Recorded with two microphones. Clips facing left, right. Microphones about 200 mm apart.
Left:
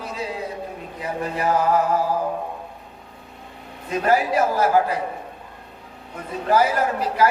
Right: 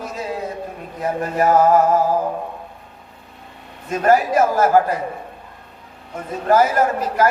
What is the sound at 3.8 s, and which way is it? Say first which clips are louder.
A man's voice: right 4 dB; 45° right (ahead or behind).